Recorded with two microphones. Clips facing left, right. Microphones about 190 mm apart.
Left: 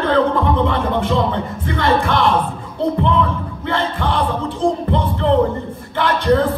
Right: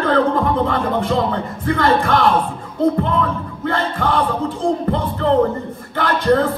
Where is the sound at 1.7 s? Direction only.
45° right (ahead or behind).